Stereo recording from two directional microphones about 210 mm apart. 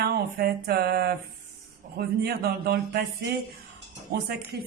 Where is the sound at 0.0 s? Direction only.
50° right (ahead or behind).